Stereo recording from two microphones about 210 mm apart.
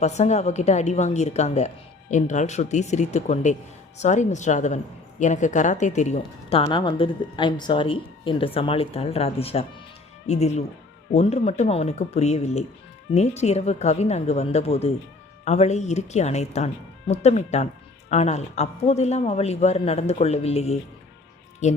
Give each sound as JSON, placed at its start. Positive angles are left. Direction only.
{"t": 0.0, "sound": "a woman's voice", "side_deg": 30}